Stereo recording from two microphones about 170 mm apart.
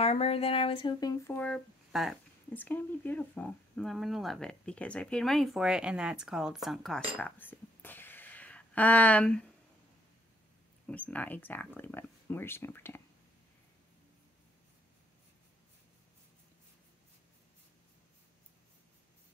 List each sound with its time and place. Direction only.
0.0 s speech: 35° left (ahead or behind); by 1.6 s 10° left (ahead or behind)
1.9 s speech: centre (ahead or behind)
2.5 s speech: 10° left (ahead or behind)
7.2 s a sound: 10° left (ahead or behind)
10.9 s speech: 10° left (ahead or behind)